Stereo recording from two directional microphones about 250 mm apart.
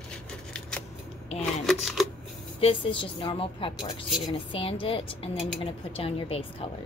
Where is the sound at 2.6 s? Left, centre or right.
Left.